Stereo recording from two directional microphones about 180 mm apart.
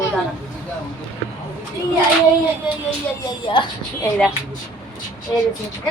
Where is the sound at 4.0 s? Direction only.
5° left (ahead or behind).